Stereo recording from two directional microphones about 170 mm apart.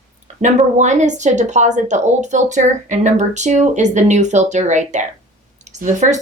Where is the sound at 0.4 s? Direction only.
45° right (ahead or behind).